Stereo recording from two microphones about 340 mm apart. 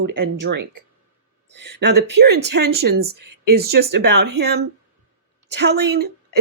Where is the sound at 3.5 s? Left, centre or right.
Right.